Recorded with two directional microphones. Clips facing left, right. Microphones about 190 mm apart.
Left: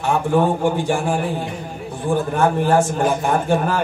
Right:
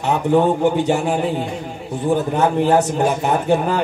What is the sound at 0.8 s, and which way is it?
Speech, 20° right (ahead or behind).